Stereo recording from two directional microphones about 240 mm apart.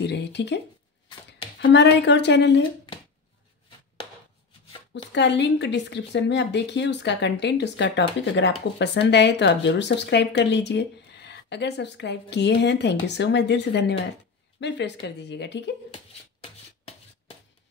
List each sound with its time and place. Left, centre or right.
0.0 s speech: left
1.6 s speech: left
5.1 s speech: left